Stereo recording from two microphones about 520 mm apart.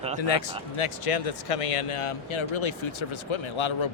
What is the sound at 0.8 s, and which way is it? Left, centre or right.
Speech, left.